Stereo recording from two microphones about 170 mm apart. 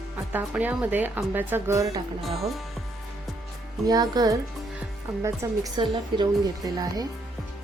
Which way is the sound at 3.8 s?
20° right (ahead or behind).